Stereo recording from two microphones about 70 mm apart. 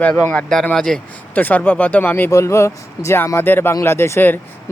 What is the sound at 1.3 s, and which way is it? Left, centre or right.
Speech, left.